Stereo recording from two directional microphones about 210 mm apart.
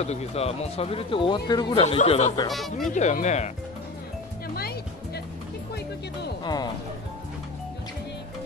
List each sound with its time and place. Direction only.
0.0 s speech: 30° left (ahead or behind)
2.0 s speech: 30° left (ahead or behind)
2.5 s speech: centre (ahead or behind)
2.9 s speech: 35° left (ahead or behind)
4.6 s music: 50° left (ahead or behind)
6.4 s speech: 20° left (ahead or behind)